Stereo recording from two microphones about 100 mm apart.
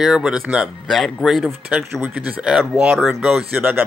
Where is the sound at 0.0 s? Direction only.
5° right (ahead or behind).